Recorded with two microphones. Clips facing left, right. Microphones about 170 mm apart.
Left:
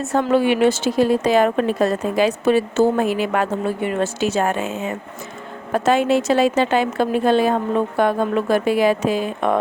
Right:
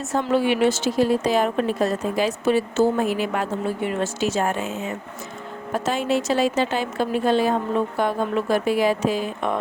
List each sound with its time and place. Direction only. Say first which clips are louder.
0.0 s speech: left 4 dB; 60° left (ahead or behind); by 4.7 s 75° left (ahead or behind)
5.7 s speech: left 6 dB; 65° left (ahead or behind)